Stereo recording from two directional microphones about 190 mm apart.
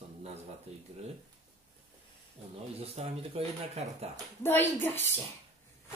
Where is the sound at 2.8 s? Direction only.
30° right (ahead or behind).